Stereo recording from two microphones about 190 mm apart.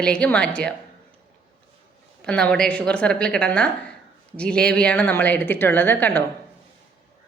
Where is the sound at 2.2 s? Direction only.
5° left (ahead or behind).